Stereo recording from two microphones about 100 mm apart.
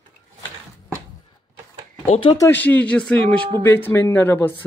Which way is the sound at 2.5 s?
15° left (ahead or behind).